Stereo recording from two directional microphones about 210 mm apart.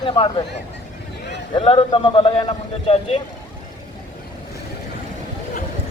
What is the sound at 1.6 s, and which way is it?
Speech, 25° left (ahead or behind).